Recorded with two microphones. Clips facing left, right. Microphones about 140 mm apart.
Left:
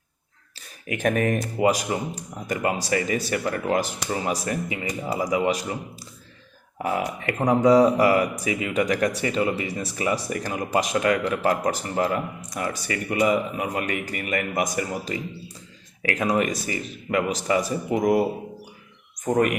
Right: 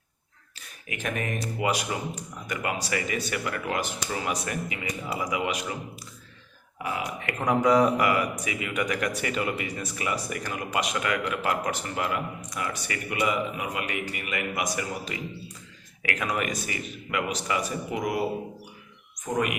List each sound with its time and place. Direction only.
0.9 s speech: 45° left (ahead or behind)
6.8 s speech: 40° left (ahead or behind)
19.2 s speech: 45° left (ahead or behind)